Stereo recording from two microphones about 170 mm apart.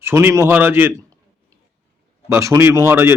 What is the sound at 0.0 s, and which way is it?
Speech, 15° right (ahead or behind).